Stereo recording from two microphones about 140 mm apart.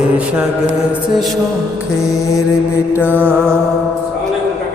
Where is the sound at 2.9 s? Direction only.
15° left (ahead or behind).